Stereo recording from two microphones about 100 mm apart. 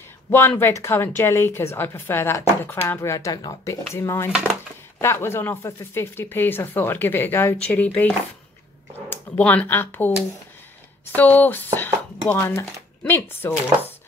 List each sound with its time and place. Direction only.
0.3 s a woman's voice: 25° left (ahead or behind)
9.4 s a woman's voice: 15° left (ahead or behind)